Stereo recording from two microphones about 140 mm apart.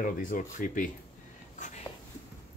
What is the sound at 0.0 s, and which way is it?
Speech, 70° left (ahead or behind).